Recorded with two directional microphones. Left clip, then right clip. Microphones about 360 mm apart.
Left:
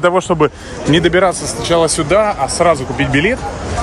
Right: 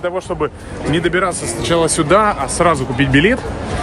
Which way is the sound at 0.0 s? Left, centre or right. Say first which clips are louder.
Left 7 dB; left.